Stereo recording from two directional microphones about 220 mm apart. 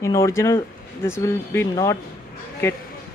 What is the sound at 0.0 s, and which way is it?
Speech, 15° left (ahead or behind).